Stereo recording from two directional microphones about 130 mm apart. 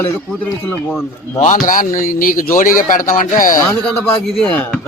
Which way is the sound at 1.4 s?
90° left.